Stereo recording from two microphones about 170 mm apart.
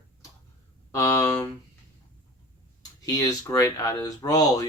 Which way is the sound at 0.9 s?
20° left (ahead or behind).